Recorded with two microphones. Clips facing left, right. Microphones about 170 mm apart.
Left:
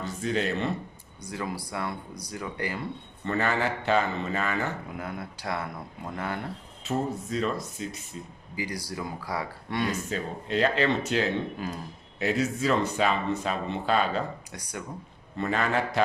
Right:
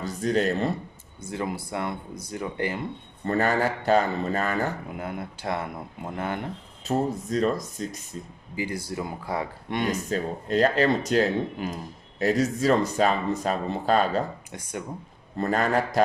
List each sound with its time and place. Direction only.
0.0 s speech: 40° right (ahead or behind)
1.2 s speech: 25° right (ahead or behind)
3.2 s speech: 40° right (ahead or behind)
4.9 s speech: 25° right (ahead or behind)
6.8 s speech: 40° right (ahead or behind)
8.5 s speech: 25° right (ahead or behind)
10.1 s speech: 40° right (ahead or behind)
14.5 s speech: 25° right (ahead or behind)
15.4 s speech: 40° right (ahead or behind)